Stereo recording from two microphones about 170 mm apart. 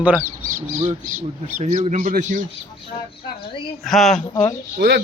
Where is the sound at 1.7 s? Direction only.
40° right (ahead or behind).